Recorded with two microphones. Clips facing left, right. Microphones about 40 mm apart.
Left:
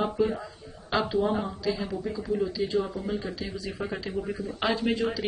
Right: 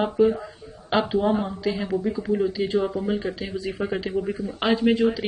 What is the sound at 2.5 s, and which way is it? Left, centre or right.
A man's voice, right.